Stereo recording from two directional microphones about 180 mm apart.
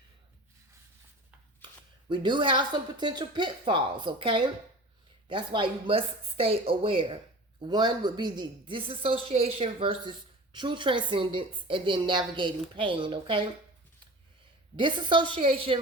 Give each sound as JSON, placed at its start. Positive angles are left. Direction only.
{"t": 2.0, "sound": "a woman's voice", "side_deg": -25}
{"t": 14.8, "sound": "a woman's voice", "side_deg": -25}